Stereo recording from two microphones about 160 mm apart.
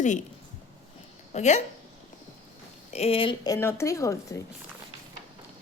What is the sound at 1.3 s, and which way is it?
Speech, 45° left (ahead or behind).